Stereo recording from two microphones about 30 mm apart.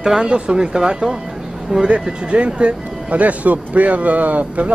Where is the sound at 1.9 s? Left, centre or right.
Right.